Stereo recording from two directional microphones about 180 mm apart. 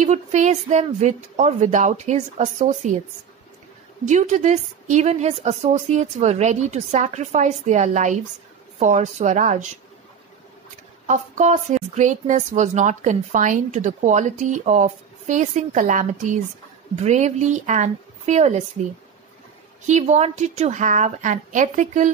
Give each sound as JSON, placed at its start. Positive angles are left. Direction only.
{"t": 0.0, "sound": "a woman's voice", "side_deg": -40}
{"t": 4.0, "sound": "a woman's voice", "side_deg": -40}
{"t": 11.1, "sound": "a woman's voice", "side_deg": -40}
{"t": 19.9, "sound": "a woman's voice", "side_deg": -40}